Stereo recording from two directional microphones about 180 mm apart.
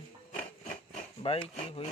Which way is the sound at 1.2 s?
30° left (ahead or behind).